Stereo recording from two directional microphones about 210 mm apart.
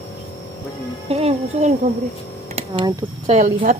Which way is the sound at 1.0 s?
30° right (ahead or behind).